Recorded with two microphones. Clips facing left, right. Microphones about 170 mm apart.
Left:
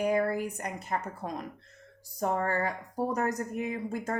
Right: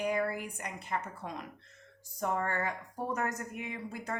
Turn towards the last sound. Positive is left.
turn(degrees=45)  # may be behind; listen again after turning